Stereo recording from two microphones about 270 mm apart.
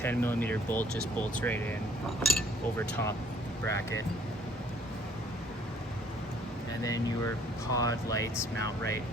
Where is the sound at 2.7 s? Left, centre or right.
Centre.